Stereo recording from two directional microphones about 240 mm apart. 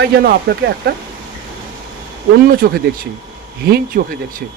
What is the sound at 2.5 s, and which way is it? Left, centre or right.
Speech, right.